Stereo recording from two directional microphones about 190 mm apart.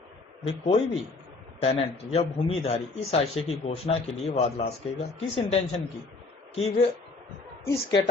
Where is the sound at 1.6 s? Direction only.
30° left (ahead or behind).